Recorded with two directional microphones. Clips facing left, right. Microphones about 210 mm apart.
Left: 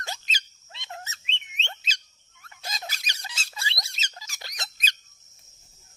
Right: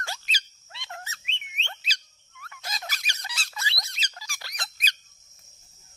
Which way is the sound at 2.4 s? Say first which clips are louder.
Even; 25° left (ahead or behind).